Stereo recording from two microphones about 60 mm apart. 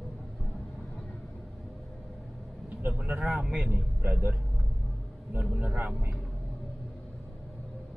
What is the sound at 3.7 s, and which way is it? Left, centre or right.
Speech, right.